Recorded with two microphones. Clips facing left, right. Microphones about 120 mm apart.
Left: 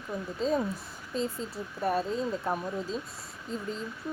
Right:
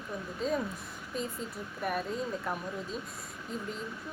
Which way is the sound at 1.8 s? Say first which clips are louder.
Left 5 dB; 30° left (ahead or behind).